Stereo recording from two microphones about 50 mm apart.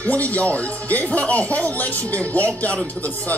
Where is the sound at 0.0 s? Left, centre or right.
Left.